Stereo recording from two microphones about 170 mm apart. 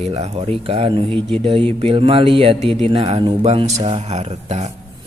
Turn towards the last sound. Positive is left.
turn(degrees=-40)  # may be behind; listen again after turning